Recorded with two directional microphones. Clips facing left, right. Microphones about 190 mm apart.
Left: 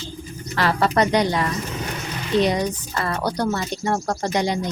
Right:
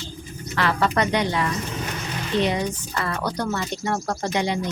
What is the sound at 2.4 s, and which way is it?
A woman's voice, 40° left (ahead or behind).